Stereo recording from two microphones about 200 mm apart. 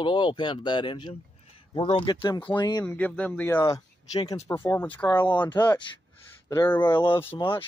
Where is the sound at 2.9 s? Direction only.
5° left (ahead or behind).